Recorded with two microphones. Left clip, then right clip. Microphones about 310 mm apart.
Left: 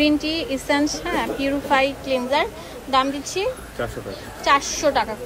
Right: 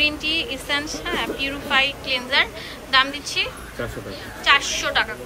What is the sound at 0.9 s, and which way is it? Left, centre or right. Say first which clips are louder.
A woman's voice: left 1 dB; left.